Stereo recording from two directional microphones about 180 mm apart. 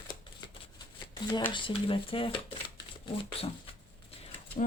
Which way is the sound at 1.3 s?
25° left (ahead or behind).